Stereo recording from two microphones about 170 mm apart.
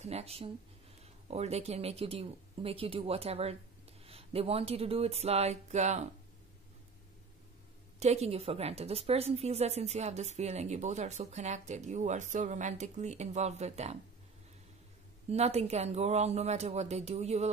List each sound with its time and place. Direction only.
0.0 s a woman's voice: 35° right (ahead or behind)
8.0 s a woman's voice: 40° right (ahead or behind)
15.2 s a woman's voice: 40° right (ahead or behind)